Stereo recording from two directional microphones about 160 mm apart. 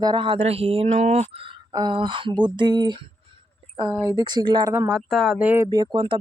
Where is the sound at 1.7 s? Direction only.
25° right (ahead or behind).